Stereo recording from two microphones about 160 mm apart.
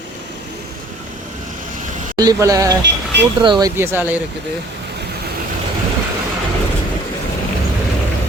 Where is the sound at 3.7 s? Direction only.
15° right (ahead or behind).